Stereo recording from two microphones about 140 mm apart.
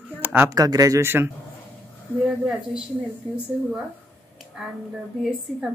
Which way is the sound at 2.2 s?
5° right (ahead or behind).